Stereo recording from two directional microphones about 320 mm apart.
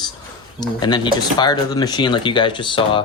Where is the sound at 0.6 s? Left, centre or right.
Centre.